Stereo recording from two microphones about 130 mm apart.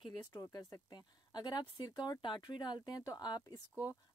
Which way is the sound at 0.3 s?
25° left (ahead or behind).